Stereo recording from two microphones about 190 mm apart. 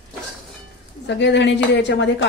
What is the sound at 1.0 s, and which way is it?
Speech, 70° left (ahead or behind).